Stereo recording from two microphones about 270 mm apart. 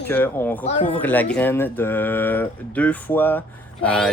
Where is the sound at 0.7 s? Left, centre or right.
Left.